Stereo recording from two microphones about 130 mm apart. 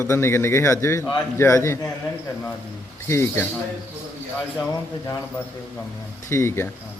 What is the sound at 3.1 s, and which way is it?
Speech, 20° left (ahead or behind).